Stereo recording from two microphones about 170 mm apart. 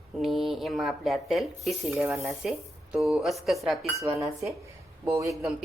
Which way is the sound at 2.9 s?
Centre (ahead or behind).